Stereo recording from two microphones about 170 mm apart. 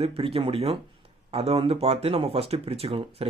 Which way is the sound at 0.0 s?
35° right (ahead or behind).